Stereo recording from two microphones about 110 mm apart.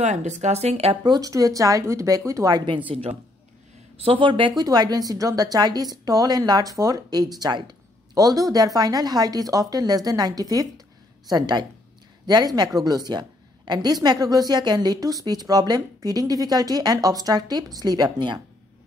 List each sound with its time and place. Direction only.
0.0 s speech: 90° right; by 0.9 s 70° right (ahead or behind)
1.0 s a woman's voice: 35° right (ahead or behind)
2.5 s speech: 45° right (ahead or behind)
2.9 s speech: 60° right (ahead or behind)
4.6 s a woman's voice: 35° right (ahead or behind)